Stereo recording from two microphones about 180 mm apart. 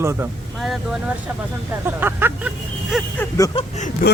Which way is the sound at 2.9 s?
Centre (ahead or behind).